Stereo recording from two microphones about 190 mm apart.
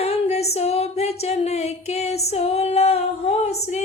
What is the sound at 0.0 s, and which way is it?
Female singing, 35° left (ahead or behind).